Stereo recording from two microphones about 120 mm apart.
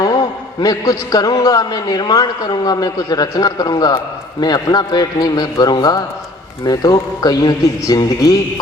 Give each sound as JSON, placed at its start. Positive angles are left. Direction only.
{"t": 0.0, "sound": "a man's voice", "side_deg": 35}